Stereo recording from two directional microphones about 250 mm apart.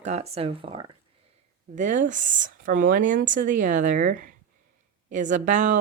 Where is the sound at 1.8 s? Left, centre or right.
Right.